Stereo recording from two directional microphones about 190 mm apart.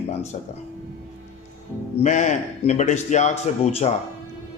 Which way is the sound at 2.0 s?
40° left (ahead or behind).